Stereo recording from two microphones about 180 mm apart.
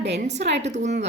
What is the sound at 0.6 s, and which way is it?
Speech, 40° right (ahead or behind).